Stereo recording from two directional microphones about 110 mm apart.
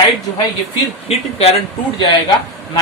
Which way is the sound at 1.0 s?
65° left (ahead or behind).